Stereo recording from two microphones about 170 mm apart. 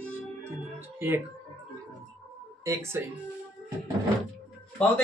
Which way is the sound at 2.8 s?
15° right (ahead or behind).